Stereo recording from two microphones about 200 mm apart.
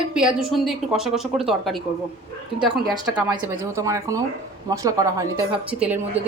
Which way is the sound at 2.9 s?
20° right (ahead or behind).